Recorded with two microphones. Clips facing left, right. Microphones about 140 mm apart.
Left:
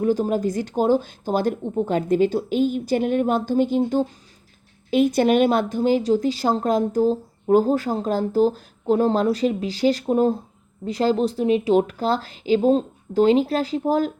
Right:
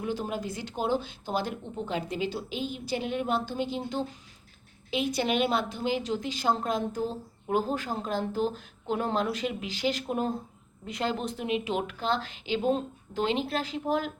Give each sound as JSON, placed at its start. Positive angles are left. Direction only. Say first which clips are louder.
{"t": 0.0, "sound": "a woman's voice", "louder": "left 11 dB", "side_deg": 40}